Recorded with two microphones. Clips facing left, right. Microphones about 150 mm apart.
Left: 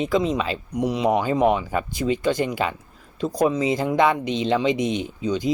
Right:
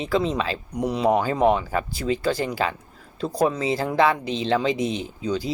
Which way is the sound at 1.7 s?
15° left (ahead or behind).